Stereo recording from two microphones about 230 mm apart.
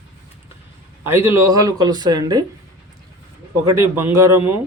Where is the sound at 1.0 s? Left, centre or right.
Centre.